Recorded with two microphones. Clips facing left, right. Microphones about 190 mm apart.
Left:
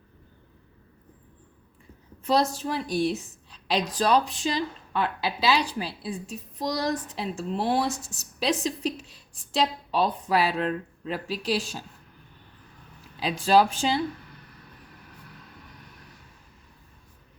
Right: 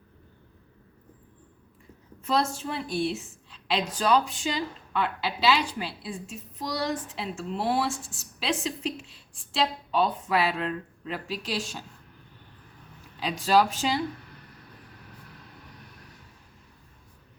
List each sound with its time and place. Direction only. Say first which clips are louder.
2.2 s a woman's voice: left 3 dB; 35° left (ahead or behind)
13.2 s speech: left 2 dB; 30° left (ahead or behind)